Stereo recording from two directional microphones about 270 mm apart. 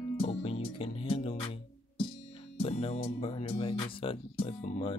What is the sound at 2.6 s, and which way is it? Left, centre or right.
Speech, left.